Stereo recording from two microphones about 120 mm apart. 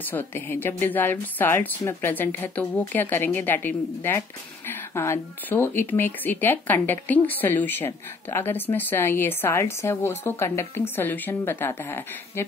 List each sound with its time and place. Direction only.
0.0 s speech: 15° left (ahead or behind)